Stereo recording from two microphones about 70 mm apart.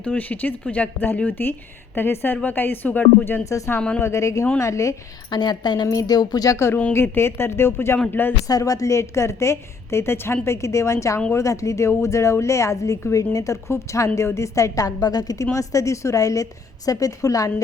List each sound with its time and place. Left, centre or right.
0.0 s speech: left
3.8 s a woman's voice: centre
4.0 s a woman's voice: left
5.3 s a woman's voice: left
6.9 s a woman's voice: left
8.4 s a woman's voice: left
15.5 s a woman's voice: left